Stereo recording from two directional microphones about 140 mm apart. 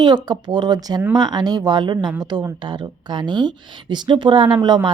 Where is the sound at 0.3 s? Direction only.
30° right (ahead or behind).